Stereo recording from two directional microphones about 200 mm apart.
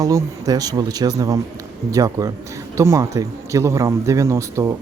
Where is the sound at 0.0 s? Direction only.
15° right (ahead or behind).